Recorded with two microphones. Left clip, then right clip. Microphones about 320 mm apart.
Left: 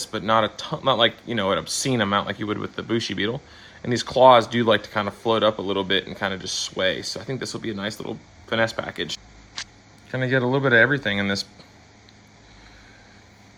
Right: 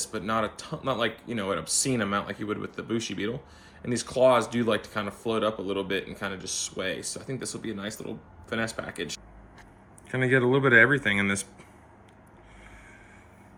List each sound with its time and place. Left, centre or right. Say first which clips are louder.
0.0 s speech: left 8 dB; left
10.1 s speech: left 1 dB; centre